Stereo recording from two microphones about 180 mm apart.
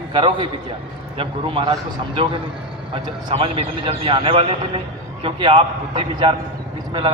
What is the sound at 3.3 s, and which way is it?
A man's voice, 30° right (ahead or behind).